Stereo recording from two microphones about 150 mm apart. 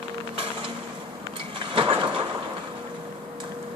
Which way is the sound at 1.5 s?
35° right (ahead or behind).